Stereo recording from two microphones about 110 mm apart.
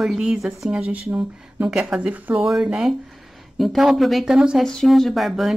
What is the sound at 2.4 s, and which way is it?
Speech, 5° right (ahead or behind).